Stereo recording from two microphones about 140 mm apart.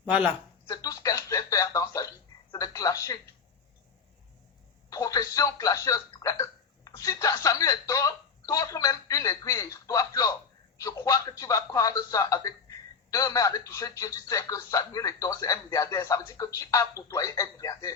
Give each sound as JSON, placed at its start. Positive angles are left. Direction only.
{"t": 0.0, "sound": "speech", "side_deg": -10}
{"t": 0.7, "sound": "a sound", "side_deg": 25}
{"t": 4.9, "sound": "speech", "side_deg": 25}